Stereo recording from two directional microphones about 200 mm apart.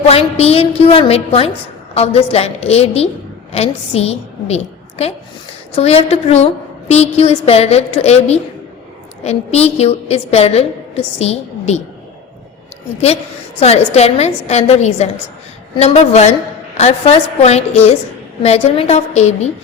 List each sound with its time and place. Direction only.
0.0 s a woman's voice: 30° left (ahead or behind)
13.6 s a woman's voice: 30° left (ahead or behind)